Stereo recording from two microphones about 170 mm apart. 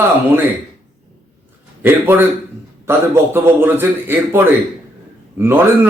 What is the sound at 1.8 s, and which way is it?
A man's voice, 10° right (ahead or behind).